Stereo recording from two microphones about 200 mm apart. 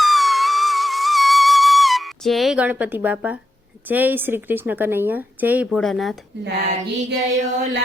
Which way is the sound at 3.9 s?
10° right (ahead or behind).